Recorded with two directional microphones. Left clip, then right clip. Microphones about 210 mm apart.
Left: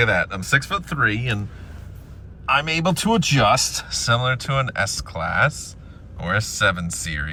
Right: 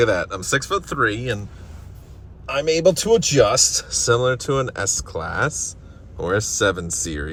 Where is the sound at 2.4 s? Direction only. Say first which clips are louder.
Right 2 dB; centre (ahead or behind).